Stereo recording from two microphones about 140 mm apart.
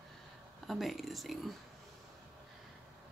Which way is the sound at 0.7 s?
Centre (ahead or behind).